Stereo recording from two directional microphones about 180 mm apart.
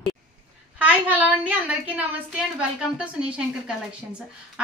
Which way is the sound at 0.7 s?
10° right (ahead or behind).